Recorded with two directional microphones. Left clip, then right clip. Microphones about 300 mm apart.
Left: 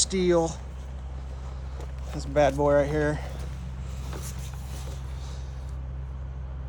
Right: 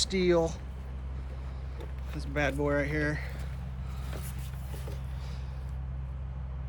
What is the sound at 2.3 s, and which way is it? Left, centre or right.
Speech, centre.